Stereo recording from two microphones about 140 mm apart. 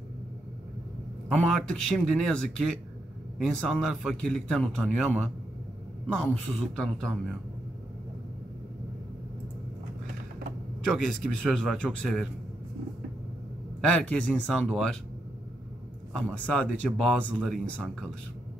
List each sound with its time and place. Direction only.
1.3 s a man's voice: 5° left (ahead or behind)
6.1 s speech: 10° left (ahead or behind)
11.4 s a man's voice: centre (ahead or behind)
13.7 s a man's voice: 5° left (ahead or behind)
16.3 s speech: 10° left (ahead or behind)